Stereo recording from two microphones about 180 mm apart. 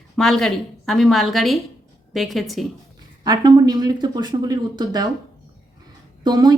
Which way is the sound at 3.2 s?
20° right (ahead or behind).